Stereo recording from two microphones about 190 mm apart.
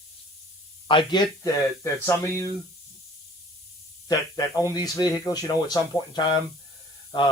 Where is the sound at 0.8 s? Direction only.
25° left (ahead or behind).